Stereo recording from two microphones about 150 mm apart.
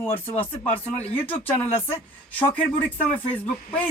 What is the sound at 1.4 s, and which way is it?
Speech, 15° left (ahead or behind).